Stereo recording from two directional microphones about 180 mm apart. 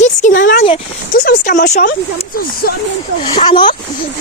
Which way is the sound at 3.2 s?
30° left (ahead or behind).